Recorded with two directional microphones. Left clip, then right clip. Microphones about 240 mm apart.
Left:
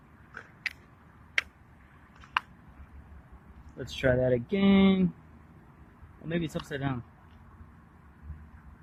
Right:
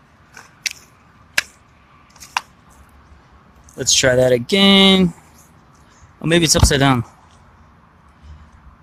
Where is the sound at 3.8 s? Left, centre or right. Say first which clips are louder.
Right 13 dB; centre.